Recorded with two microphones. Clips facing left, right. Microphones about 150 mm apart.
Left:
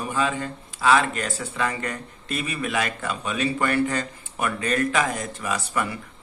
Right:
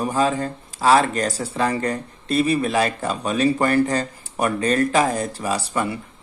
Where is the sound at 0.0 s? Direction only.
40° right (ahead or behind).